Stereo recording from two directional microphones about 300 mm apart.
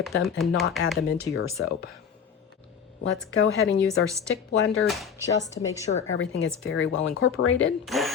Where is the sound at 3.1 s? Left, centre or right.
Left.